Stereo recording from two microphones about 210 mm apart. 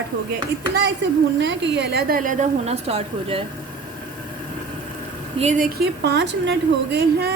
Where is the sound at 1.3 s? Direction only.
60° right (ahead or behind); by 3.4 s 30° right (ahead or behind).